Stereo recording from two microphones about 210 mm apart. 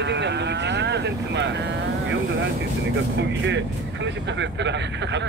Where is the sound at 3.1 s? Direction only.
60° right (ahead or behind).